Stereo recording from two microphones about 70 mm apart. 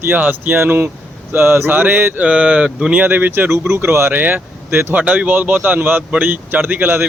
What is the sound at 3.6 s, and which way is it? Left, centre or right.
Speech, right.